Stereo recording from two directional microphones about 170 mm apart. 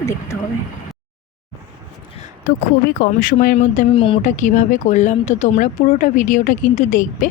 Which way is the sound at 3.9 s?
30° left (ahead or behind).